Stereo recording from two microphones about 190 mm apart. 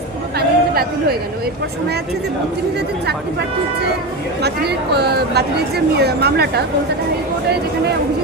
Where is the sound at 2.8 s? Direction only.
60° right (ahead or behind).